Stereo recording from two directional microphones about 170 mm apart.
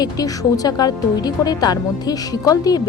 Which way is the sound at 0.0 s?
20° left (ahead or behind).